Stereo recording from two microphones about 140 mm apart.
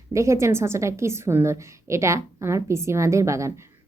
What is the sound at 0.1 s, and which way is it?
A woman's voice, 20° right (ahead or behind).